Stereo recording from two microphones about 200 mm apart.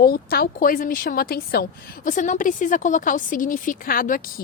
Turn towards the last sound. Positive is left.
turn(degrees=45)  # may be behind; listen again after turning